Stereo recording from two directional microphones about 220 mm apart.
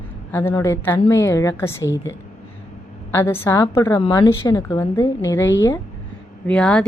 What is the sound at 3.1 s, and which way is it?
A woman's voice, 10° left (ahead or behind).